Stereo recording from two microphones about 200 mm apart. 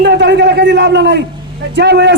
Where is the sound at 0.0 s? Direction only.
60° right (ahead or behind).